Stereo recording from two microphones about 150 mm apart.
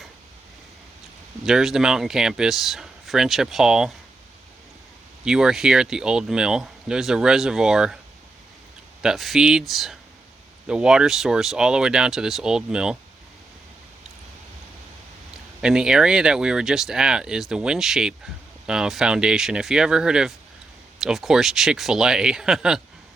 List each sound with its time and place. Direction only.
1.5 s speech: 5° right (ahead or behind)
5.2 s speech: 5° right (ahead or behind)
9.0 s speech: centre (ahead or behind)
15.6 s speech: 5° right (ahead or behind)